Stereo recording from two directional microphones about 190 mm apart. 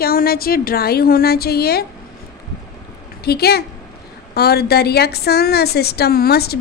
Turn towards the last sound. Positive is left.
turn(degrees=55)  # may be behind; listen again after turning